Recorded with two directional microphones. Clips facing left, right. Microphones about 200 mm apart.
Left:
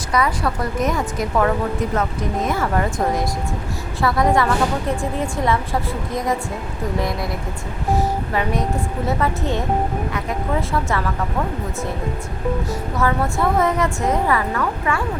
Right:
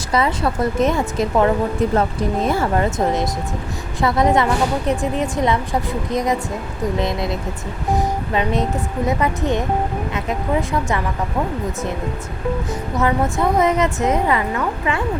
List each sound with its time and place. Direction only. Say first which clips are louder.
0.1 s a woman's voice: right 2 dB; 25° right (ahead or behind)
13.0 s a woman's voice: right 2 dB; 20° right (ahead or behind)